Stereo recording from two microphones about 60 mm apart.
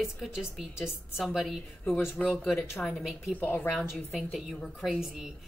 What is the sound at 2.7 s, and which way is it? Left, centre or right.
Speech, centre.